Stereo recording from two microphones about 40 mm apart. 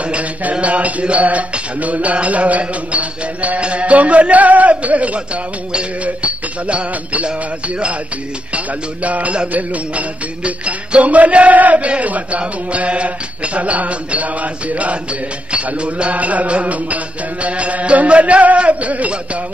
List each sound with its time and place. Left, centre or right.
0.0 s music: right
8.5 s music: right